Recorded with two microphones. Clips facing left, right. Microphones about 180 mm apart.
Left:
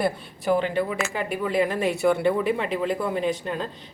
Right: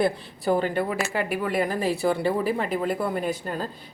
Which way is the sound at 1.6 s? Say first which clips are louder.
Left 3 dB; 35° right (ahead or behind).